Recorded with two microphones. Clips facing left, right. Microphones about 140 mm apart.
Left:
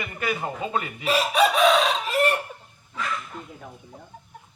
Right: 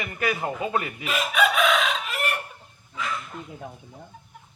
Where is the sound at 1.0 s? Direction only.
35° left (ahead or behind).